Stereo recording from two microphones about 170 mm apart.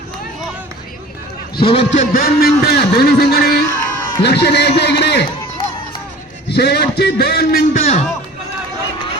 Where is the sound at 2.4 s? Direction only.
75° left (ahead or behind).